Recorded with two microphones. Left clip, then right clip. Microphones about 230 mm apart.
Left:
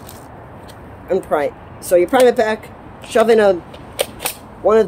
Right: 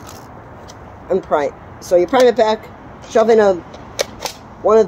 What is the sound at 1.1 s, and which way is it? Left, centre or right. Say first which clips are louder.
Speech: right 1 dB; centre.